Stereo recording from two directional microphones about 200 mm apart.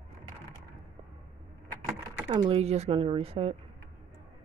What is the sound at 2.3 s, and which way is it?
Speech, 25° right (ahead or behind).